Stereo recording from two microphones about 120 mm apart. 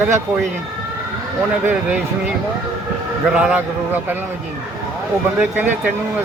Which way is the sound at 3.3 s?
10° right (ahead or behind).